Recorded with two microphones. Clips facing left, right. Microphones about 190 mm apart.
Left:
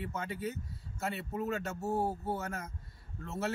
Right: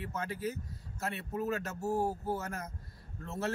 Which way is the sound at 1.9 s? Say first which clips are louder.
Right 1 dB; 30° left (ahead or behind).